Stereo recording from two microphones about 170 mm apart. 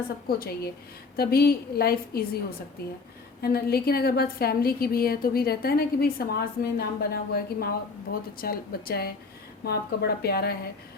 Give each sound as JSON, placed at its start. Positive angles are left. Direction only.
{"t": 0.3, "sound": "a woman's voice", "side_deg": 60}
{"t": 3.4, "sound": "a woman's voice", "side_deg": 65}